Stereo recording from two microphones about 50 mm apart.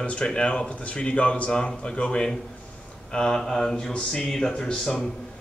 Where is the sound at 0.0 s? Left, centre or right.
Left.